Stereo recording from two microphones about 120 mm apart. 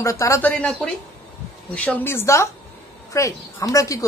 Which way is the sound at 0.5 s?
10° left (ahead or behind).